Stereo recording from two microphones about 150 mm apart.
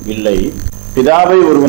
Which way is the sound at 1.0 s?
15° right (ahead or behind).